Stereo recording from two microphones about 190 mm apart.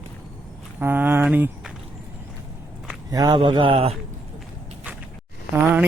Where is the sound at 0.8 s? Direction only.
10° right (ahead or behind).